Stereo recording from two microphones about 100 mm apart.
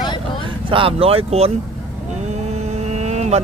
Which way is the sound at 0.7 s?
65° right (ahead or behind).